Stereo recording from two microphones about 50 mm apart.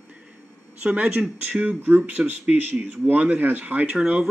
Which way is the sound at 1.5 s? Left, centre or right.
Right.